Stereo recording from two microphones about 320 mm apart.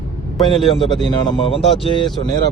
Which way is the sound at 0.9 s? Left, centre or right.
Centre.